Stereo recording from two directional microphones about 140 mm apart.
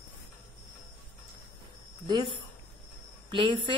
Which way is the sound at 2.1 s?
30° right (ahead or behind).